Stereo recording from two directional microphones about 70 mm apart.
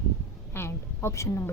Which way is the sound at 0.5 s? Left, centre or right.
Left.